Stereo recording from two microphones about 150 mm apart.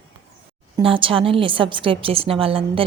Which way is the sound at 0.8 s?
35° right (ahead or behind).